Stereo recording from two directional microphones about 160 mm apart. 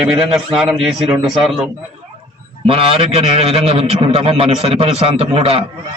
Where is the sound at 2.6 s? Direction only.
35° right (ahead or behind).